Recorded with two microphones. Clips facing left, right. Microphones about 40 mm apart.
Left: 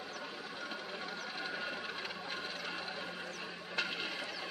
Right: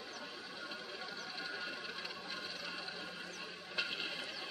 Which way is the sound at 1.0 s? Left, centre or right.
Left.